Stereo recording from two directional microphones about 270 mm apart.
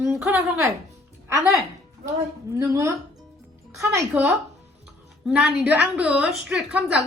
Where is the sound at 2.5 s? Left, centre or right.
Centre.